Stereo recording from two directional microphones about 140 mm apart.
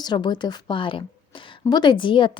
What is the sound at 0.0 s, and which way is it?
A woman's voice, 30° left (ahead or behind).